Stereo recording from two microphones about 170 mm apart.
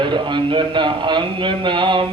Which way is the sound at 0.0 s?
25° right (ahead or behind).